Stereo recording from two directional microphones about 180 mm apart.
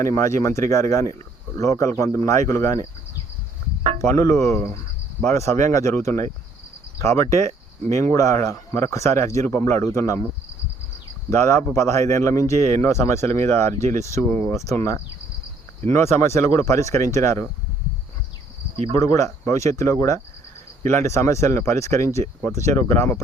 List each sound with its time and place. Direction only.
0.0 s speech: 15° left (ahead or behind)
3.9 s speech: 15° left (ahead or behind)
11.3 s speech: 15° left (ahead or behind)
18.9 s speech: 15° left (ahead or behind)